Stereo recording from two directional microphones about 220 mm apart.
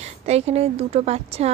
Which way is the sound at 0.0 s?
30° right (ahead or behind).